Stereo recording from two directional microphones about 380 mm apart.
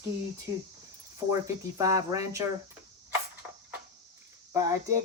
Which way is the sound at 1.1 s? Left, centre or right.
Centre.